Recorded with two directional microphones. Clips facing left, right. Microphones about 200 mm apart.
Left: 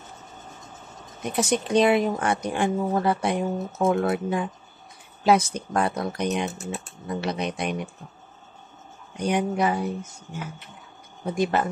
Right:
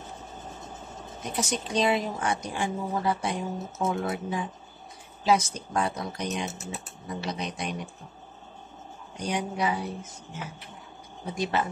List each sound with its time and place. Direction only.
1.3 s speech: 60° left (ahead or behind)
9.1 s speech: 55° left (ahead or behind)
11.3 s speech: 50° left (ahead or behind)